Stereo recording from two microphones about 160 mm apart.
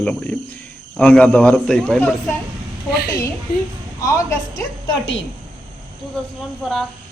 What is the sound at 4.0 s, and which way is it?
Speech, 20° left (ahead or behind).